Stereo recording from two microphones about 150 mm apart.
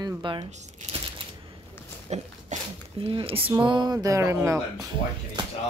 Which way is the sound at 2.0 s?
45° right (ahead or behind).